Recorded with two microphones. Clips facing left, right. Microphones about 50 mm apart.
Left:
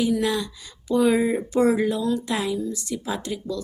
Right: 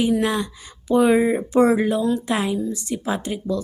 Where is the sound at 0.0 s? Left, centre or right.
Right.